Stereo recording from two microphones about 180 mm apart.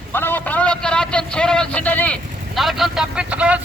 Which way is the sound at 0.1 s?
10° left (ahead or behind).